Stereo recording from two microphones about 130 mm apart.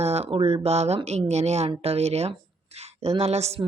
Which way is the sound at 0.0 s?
55° right (ahead or behind).